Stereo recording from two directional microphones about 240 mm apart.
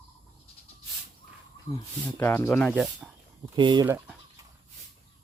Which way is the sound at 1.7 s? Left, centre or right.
Centre.